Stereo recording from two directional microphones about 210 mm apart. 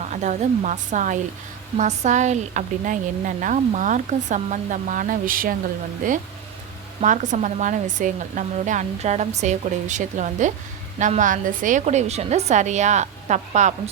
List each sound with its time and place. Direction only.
0.0 s speech: 35° right (ahead or behind)